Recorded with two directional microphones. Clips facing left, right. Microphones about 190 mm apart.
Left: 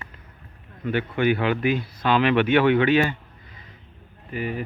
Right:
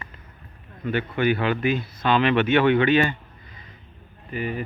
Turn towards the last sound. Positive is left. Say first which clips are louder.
# even
turn(degrees=5)  # may be behind; listen again after turning